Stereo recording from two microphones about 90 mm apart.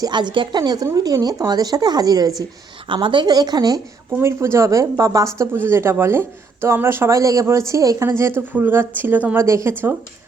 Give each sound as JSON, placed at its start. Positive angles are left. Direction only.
{"t": 0.0, "sound": "speech", "side_deg": -55}
{"t": 2.9, "sound": "speech", "side_deg": -65}
{"t": 4.2, "sound": "speech", "side_deg": -30}
{"t": 8.5, "sound": "speech", "side_deg": -25}
{"t": 9.4, "sound": "speech", "side_deg": -30}